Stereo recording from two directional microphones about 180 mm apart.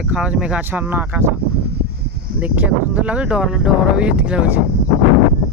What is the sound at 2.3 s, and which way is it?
Speech, 10° right (ahead or behind).